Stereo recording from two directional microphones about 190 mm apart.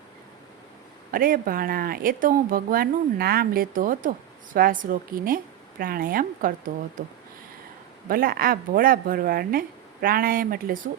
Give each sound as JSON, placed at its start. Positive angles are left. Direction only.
{"t": 1.1, "sound": "speech", "side_deg": -50}
{"t": 8.0, "sound": "speech", "side_deg": -50}